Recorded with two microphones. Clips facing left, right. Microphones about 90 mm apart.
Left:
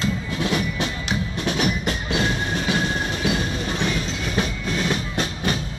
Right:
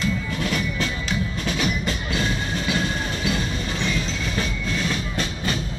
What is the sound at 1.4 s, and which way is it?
Music, 50° left (ahead or behind).